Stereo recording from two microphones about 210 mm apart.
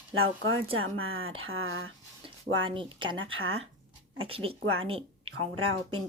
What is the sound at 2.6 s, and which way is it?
Speech, 25° right (ahead or behind).